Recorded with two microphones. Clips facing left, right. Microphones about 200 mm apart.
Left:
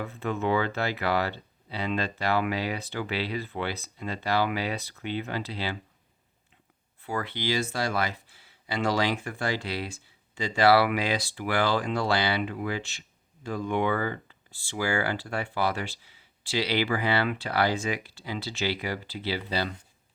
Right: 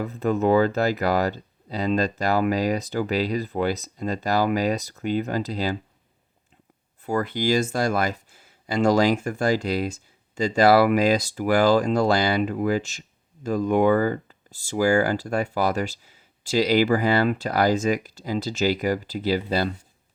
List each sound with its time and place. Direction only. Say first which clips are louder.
0.0 s speech: right 7 dB; 40° right (ahead or behind)
7.0 s speech: right 7 dB; 45° right (ahead or behind)